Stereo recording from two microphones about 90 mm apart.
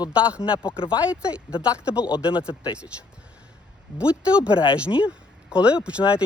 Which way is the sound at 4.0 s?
15° right (ahead or behind).